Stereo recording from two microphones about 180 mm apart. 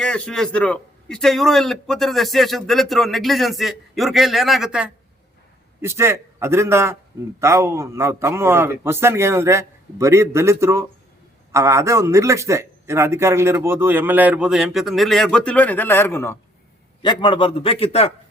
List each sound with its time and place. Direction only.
0.0 s a man's voice: 5° left (ahead or behind)
5.8 s a man's voice: 15° right (ahead or behind); by 16.4 s 15° left (ahead or behind)
17.0 s a man's voice: 25° left (ahead or behind)